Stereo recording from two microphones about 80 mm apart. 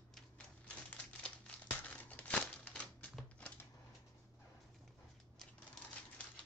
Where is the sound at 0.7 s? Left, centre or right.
Centre.